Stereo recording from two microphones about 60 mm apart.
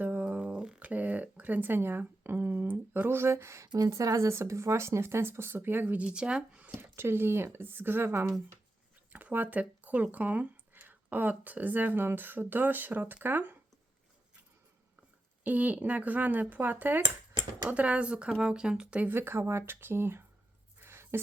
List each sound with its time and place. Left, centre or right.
0.0 s a sound: right
3.8 s speech: right
6.0 s speech: centre
6.7 s speech: right
9.1 s speech: right
15.4 s speech: right
17.7 s speech: right
19.0 s speech: right
20.7 s a sound: right